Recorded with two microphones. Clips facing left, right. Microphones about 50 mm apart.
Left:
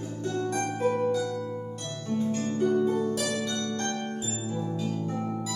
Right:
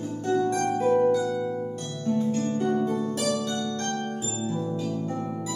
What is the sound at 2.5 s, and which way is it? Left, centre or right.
Harp, centre.